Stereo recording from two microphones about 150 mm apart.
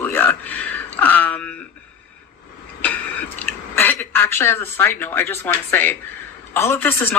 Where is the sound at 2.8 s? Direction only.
10° left (ahead or behind).